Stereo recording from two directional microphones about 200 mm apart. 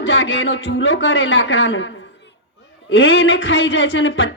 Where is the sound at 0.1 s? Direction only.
65° left (ahead or behind).